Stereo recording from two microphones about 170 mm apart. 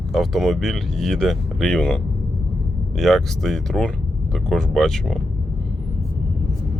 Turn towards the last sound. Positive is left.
turn(degrees=0)  # may be behind; listen again after turning